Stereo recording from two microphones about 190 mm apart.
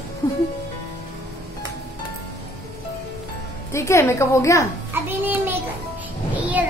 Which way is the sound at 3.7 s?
15° left (ahead or behind).